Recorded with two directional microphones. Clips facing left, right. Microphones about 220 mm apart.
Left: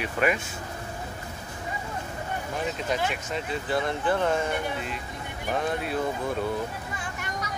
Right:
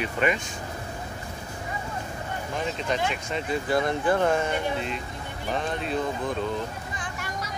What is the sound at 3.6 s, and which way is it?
Speech, 40° right (ahead or behind).